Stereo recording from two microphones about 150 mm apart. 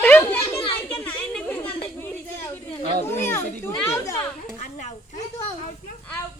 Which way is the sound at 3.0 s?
15° left (ahead or behind).